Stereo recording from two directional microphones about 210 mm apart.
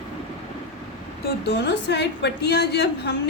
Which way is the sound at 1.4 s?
50° left (ahead or behind).